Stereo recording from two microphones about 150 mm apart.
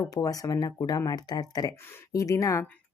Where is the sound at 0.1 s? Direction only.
25° left (ahead or behind).